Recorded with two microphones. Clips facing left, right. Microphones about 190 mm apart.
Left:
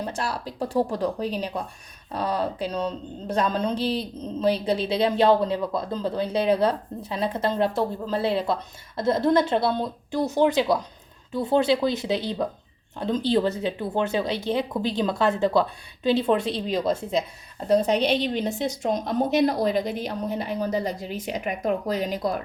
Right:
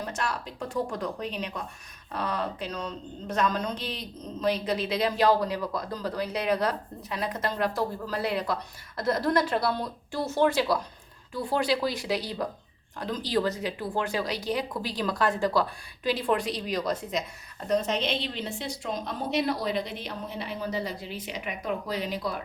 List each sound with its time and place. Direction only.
0.0 s speech: 30° left (ahead or behind)